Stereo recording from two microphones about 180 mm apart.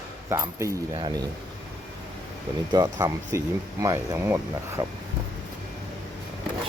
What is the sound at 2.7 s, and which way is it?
Speech, 20° right (ahead or behind).